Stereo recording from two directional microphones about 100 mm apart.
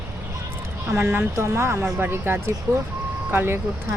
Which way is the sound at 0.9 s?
20° right (ahead or behind).